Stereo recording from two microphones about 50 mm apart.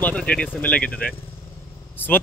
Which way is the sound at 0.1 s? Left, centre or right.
Left.